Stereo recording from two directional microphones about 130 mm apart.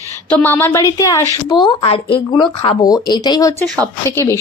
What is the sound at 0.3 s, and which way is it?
Speech, 15° left (ahead or behind).